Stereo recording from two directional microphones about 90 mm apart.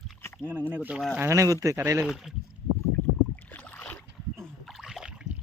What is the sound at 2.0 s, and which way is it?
Speech, 5° right (ahead or behind).